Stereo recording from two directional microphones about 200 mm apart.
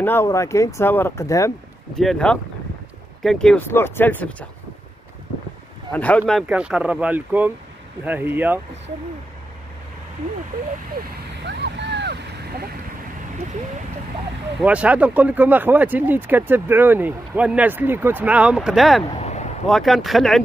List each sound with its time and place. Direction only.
0.0 s speech: 10° left (ahead or behind)
2.0 s speech: 5° left (ahead or behind)
5.9 s speech: 5° left (ahead or behind)
6.4 s speech: 5° right (ahead or behind)
11.4 s a sound: 60° right (ahead or behind)
14.6 s speech: 5° right (ahead or behind)
19.0 s a sound: 30° left (ahead or behind)
19.7 s speech: centre (ahead or behind)